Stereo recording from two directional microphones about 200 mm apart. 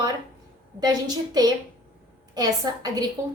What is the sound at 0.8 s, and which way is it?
A woman's voice, 20° right (ahead or behind).